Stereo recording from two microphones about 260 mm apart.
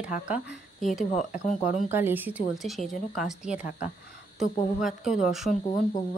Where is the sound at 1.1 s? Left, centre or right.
Left.